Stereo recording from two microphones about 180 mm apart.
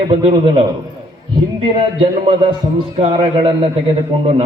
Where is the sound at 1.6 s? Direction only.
30° right (ahead or behind).